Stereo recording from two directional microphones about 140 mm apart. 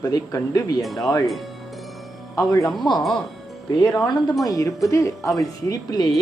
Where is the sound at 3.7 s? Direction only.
30° left (ahead or behind).